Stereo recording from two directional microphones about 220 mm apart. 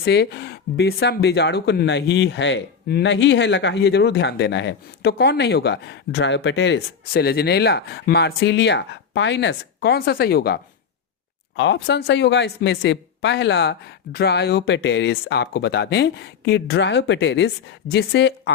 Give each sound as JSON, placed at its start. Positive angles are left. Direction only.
{"t": 0.0, "sound": "speech", "side_deg": 50}